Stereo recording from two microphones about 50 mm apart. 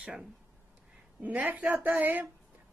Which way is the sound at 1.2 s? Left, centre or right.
Right.